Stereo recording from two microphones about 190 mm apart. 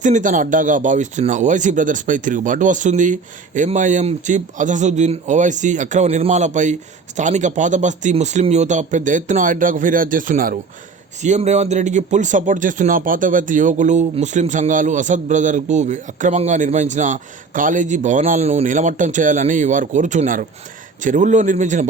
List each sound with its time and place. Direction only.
0.0 s speech: 40° right (ahead or behind)